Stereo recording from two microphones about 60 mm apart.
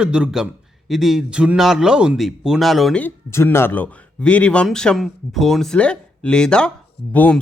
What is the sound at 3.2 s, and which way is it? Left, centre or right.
Speech, left.